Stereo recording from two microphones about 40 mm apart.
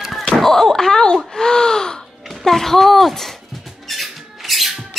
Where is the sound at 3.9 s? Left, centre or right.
Centre.